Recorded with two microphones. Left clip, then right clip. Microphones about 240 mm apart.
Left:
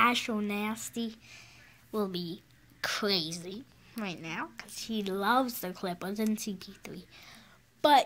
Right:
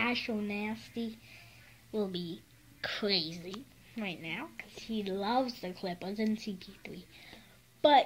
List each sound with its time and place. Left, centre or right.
0.0 s a woman's voice: left